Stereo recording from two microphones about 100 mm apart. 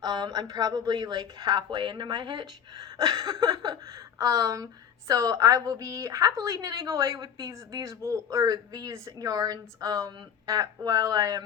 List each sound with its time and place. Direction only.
0.0 s speech: 45° right (ahead or behind)